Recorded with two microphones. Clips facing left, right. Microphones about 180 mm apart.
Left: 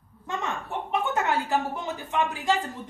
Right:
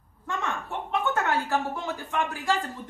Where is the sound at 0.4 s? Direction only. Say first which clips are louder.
Even; 15° left (ahead or behind).